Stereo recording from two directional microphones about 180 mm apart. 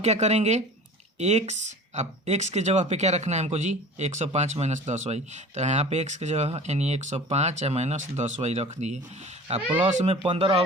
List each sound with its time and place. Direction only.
0.0 s speech: 40° right (ahead or behind)